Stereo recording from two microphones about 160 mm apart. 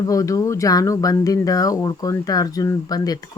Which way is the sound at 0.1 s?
20° left (ahead or behind).